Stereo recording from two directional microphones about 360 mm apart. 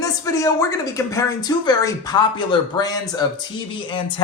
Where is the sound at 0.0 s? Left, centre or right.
Centre.